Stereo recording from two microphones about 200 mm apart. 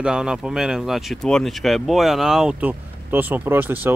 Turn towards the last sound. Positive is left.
turn(degrees=-10)  # may be behind; listen again after turning